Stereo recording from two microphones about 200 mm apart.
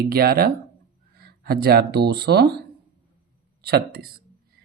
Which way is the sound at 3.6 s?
50° right (ahead or behind).